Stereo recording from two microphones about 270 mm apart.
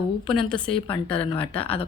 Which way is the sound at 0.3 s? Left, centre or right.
Centre.